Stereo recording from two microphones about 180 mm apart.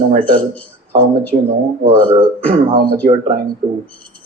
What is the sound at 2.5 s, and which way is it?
Speech, 25° right (ahead or behind).